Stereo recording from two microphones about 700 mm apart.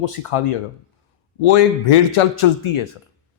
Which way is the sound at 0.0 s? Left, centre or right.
Left.